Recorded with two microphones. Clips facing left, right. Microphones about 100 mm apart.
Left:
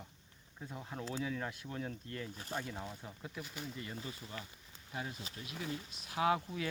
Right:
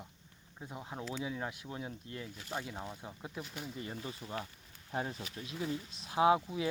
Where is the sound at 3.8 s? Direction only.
30° right (ahead or behind).